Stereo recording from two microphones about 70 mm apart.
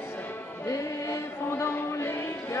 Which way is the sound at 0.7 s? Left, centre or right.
Left.